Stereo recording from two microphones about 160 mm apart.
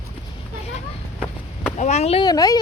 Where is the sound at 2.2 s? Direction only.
25° left (ahead or behind).